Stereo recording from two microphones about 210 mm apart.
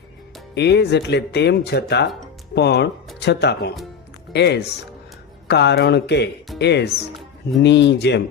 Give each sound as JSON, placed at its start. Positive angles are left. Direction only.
{"t": 0.5, "sound": "speech", "side_deg": 55}